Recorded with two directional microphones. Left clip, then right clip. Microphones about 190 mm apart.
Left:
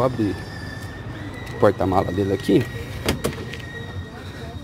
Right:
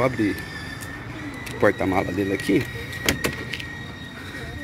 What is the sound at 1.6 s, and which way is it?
Speech, 5° left (ahead or behind).